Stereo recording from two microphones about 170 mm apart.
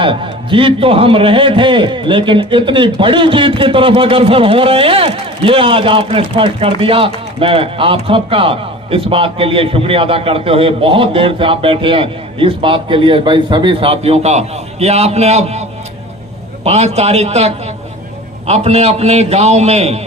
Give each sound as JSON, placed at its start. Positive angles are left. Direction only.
{"t": 0.0, "sound": "a man's voice", "side_deg": -30}
{"t": 16.6, "sound": "a man's voice", "side_deg": -40}